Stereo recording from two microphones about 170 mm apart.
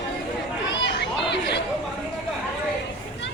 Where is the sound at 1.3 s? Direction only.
90° left.